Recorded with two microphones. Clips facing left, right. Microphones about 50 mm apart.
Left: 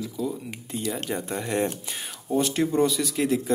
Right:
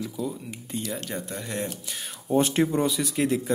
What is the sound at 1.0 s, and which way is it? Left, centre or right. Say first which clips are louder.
Speech: left 4 dB; centre.